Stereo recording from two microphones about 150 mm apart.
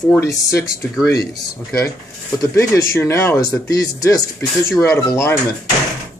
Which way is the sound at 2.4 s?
20° left (ahead or behind).